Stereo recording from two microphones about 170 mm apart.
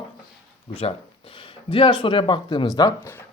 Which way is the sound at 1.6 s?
30° left (ahead or behind).